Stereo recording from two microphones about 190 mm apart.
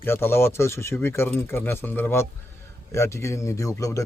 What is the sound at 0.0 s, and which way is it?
Speech, 10° left (ahead or behind).